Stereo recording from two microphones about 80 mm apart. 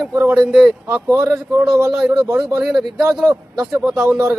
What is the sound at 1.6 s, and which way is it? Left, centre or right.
Speech, centre.